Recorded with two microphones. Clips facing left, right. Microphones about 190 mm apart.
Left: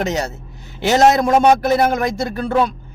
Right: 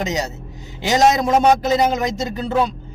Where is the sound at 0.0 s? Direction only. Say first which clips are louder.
Left 2 dB; 15° right (ahead or behind).